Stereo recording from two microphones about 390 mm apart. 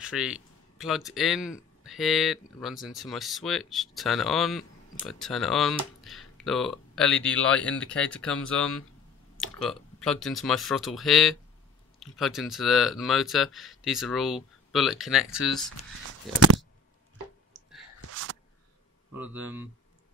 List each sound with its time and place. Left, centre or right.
0.0 s speech: centre
18.1 s a sound: right
19.1 s speech: centre